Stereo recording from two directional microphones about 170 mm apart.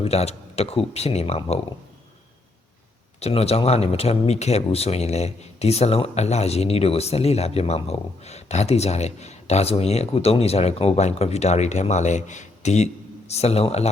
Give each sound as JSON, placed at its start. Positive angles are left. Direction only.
{"t": 0.0, "sound": "speech", "side_deg": 40}
{"t": 3.2, "sound": "speech", "side_deg": 35}